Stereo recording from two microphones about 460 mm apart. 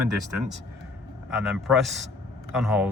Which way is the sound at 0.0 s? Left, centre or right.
Right.